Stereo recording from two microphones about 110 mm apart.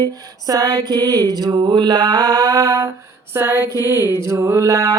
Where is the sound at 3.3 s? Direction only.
20° right (ahead or behind).